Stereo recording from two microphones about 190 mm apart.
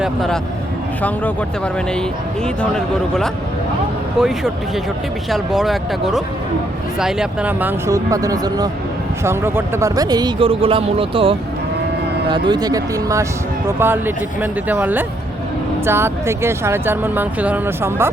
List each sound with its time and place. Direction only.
0.0 s speech: centre (ahead or behind)